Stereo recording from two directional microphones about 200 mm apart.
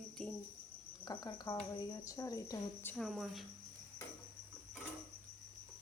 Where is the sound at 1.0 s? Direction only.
20° left (ahead or behind); by 3.4 s centre (ahead or behind).